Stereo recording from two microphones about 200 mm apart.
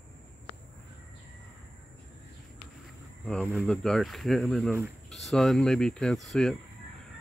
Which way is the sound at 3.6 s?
5° left (ahead or behind).